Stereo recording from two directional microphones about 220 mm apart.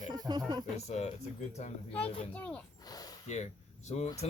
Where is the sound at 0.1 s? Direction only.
20° right (ahead or behind).